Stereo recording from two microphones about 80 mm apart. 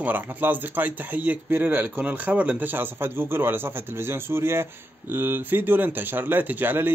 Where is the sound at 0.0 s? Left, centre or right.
Right.